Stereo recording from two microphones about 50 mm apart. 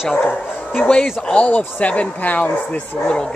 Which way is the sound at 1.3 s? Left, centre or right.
Left.